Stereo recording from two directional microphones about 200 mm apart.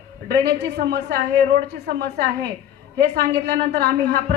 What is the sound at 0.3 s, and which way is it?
Speech, 55° right (ahead or behind).